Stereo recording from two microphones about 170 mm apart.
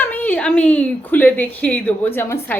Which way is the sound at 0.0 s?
10° left (ahead or behind).